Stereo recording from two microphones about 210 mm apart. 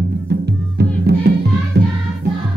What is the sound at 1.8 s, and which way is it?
Music, 55° right (ahead or behind).